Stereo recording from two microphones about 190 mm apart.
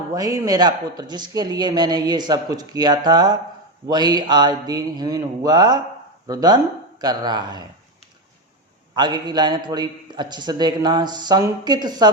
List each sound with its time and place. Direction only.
0.1 s speech: 15° right (ahead or behind)
9.0 s speech: 20° right (ahead or behind)